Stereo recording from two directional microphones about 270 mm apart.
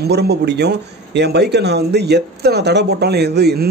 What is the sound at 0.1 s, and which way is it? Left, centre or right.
A man's voice, right.